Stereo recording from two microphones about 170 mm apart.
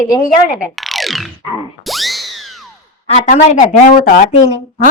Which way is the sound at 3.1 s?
45° left (ahead or behind).